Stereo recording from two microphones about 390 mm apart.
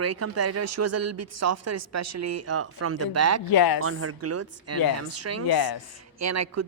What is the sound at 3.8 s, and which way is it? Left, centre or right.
A woman's voice, right.